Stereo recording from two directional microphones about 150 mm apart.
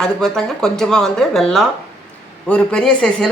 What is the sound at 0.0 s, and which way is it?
Speech, centre (ahead or behind).